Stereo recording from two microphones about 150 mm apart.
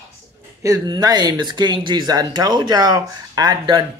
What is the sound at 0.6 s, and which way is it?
Speech, 25° right (ahead or behind).